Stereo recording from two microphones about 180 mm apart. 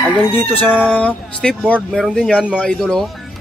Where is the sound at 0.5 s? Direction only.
5° right (ahead or behind).